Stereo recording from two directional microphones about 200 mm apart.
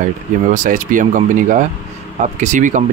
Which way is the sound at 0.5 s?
40° right (ahead or behind).